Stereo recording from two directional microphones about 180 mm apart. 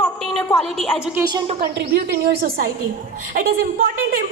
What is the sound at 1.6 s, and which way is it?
A woman's voice, 60° right (ahead or behind).